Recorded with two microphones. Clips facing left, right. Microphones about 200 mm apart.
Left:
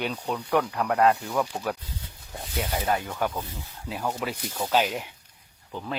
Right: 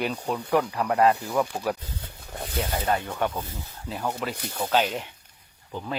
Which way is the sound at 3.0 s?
Centre (ahead or behind).